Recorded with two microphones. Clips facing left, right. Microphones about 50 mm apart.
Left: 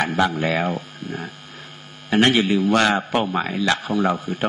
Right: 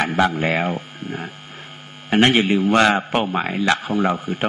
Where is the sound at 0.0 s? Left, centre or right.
Right.